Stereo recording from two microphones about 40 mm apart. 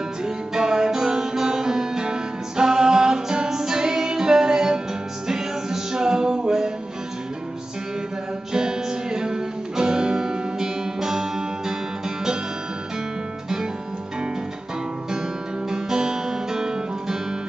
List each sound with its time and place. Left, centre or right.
0.2 s music: centre
8.5 s music: centre
15.7 s music: centre